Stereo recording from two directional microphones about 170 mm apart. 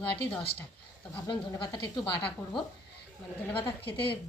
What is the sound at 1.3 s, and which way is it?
Speech, 30° left (ahead or behind).